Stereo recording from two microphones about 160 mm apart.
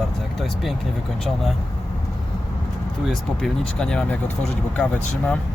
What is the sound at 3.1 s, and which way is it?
Speech, 5° left (ahead or behind).